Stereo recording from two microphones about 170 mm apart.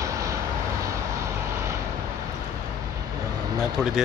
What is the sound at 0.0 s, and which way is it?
Vehicle, 20° right (ahead or behind).